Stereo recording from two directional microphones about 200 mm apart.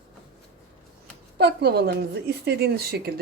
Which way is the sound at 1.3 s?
55° right (ahead or behind).